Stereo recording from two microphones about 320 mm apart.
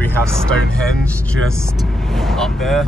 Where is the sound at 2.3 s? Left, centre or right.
Centre.